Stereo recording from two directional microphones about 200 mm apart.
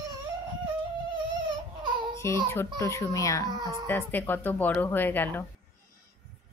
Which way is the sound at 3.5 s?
20° right (ahead or behind).